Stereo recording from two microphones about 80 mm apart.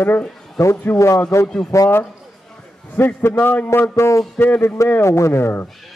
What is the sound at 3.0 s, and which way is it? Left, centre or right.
A man's voice, left.